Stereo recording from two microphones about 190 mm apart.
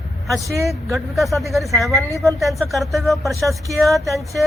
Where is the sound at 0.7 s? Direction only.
Centre (ahead or behind).